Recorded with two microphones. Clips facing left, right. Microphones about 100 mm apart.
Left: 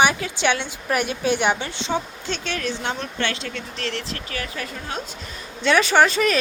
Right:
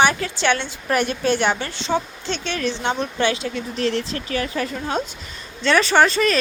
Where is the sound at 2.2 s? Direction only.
5° left (ahead or behind); by 4.0 s 15° right (ahead or behind).